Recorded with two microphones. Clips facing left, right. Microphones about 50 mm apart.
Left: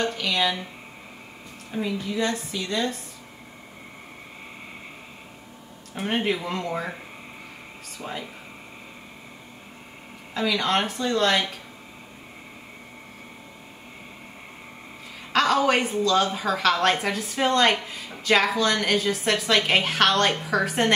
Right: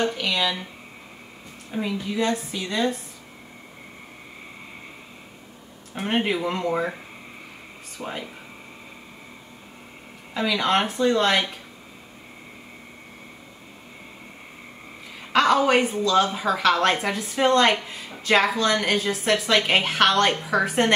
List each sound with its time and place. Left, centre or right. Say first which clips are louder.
0.0 s a sound: right 2 dB; centre
1.8 s a woman's voice: right 1 dB; centre
5.9 s a woman's voice: right 1 dB; centre
8.0 s a woman's voice: right 2 dB; centre
10.3 s a woman's voice: right 2 dB; centre
15.3 s a woman's voice: right 2 dB; centre